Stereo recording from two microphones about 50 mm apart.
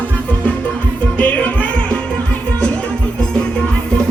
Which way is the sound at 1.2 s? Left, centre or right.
Left.